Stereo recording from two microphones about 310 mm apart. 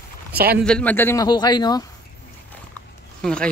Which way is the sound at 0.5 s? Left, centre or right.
Centre.